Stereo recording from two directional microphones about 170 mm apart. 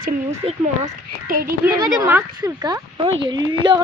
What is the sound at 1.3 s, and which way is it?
Speech, 60° right (ahead or behind).